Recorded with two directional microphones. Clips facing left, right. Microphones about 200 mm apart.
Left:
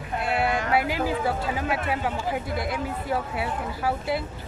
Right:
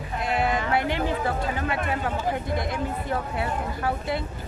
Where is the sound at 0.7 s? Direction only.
5° left (ahead or behind).